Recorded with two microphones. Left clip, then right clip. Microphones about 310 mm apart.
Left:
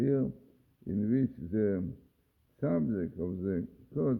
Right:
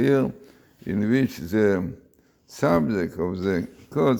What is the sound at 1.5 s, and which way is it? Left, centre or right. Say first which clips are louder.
Speech: right 11 dB; centre.